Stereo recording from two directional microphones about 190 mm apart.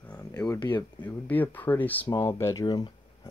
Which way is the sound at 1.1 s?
10° left (ahead or behind).